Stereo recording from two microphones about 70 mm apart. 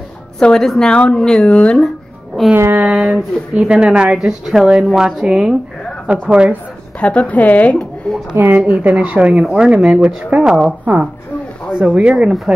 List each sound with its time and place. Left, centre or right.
0.4 s a woman's voice: centre
2.5 s a sound: right
2.8 s a woman's voice: centre
7.0 s a woman's voice: centre
7.7 s speech: centre
8.4 s a woman's voice: right
11.7 s a woman's voice: centre